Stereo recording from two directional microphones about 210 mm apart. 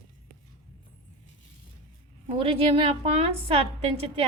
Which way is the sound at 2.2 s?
25° right (ahead or behind).